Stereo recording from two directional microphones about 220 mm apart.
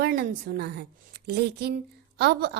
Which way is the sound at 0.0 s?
45° right (ahead or behind).